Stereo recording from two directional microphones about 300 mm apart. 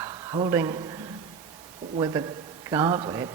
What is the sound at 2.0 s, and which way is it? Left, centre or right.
Speech, centre.